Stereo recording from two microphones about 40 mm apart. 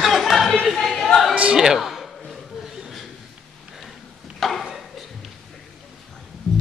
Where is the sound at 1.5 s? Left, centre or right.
Centre.